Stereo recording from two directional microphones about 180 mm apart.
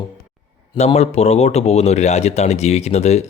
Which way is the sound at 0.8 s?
35° left (ahead or behind).